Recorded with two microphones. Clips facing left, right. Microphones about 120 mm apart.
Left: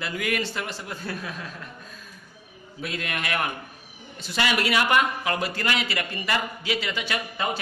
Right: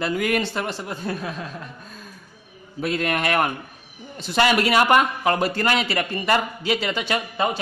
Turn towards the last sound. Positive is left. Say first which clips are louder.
# right 6 dB
turn(degrees=-25)  # may be behind; listen again after turning